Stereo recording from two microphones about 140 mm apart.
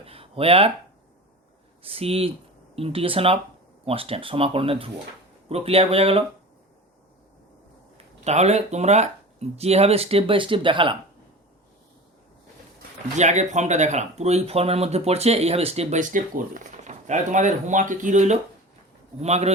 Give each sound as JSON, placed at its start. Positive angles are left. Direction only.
{"t": 0.0, "sound": "speech", "side_deg": -45}
{"t": 1.8, "sound": "speech", "side_deg": -45}
{"t": 7.9, "sound": "speech", "side_deg": -50}
{"t": 13.1, "sound": "speech", "side_deg": -55}